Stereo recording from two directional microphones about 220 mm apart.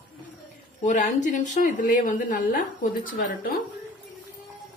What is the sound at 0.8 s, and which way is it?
Speech, 35° left (ahead or behind).